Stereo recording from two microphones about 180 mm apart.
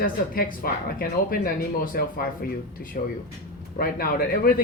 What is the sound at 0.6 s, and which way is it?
Speech, 55° left (ahead or behind).